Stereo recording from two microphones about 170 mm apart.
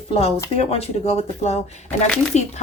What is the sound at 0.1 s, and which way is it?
A woman's voice, 35° left (ahead or behind).